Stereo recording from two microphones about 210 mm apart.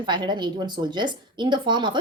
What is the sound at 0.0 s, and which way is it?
A woman's voice, 20° right (ahead or behind).